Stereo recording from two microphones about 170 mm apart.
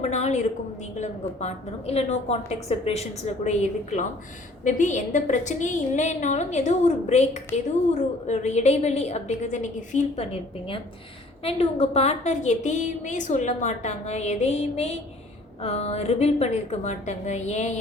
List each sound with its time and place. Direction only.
0.0 s a sound: 40° left (ahead or behind)
0.9 s a woman's voice: 40° left (ahead or behind)
11.4 s a woman's voice: 35° left (ahead or behind)